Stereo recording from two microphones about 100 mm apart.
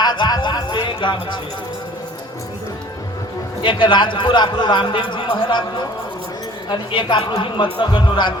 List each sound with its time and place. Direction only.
0.0 s a sound: 45° left (ahead or behind)
3.6 s a man's voice: 55° left (ahead or behind)
6.7 s a man's voice: 50° left (ahead or behind)